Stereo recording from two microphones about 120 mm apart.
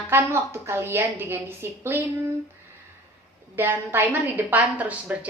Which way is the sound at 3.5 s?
15° right (ahead or behind).